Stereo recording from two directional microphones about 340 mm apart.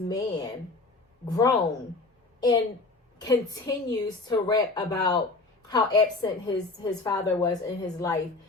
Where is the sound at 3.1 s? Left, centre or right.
Centre.